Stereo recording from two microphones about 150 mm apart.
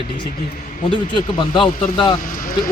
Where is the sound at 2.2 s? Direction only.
70° left (ahead or behind).